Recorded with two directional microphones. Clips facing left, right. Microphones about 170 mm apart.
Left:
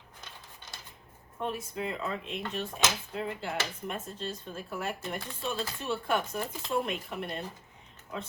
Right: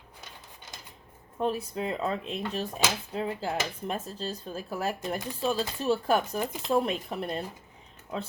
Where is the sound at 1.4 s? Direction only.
35° right (ahead or behind).